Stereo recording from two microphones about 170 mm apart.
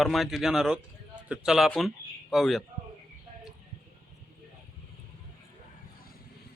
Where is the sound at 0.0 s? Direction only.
Centre (ahead or behind).